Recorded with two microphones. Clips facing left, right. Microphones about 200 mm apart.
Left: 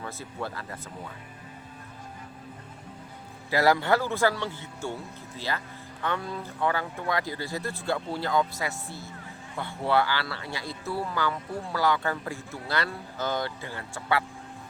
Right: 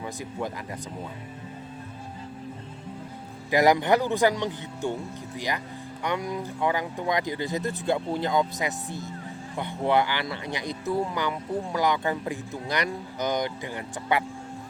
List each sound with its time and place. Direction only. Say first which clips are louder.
0.0 s speech: right 3 dB; 15° right (ahead or behind)
3.5 s speech: right 3 dB; 15° right (ahead or behind)